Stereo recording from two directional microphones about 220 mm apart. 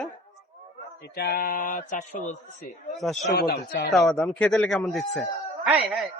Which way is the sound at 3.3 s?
45° left (ahead or behind).